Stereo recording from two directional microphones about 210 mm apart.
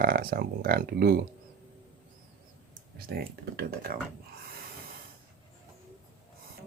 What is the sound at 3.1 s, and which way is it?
Speech, 45° right (ahead or behind).